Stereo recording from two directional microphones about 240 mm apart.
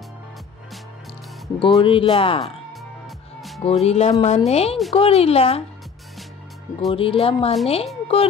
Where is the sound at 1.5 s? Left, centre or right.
Left.